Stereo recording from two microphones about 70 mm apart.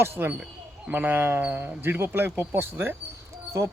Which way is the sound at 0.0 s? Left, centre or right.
Right.